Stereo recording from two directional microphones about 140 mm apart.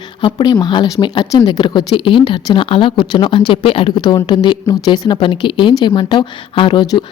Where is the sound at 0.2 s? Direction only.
35° left (ahead or behind).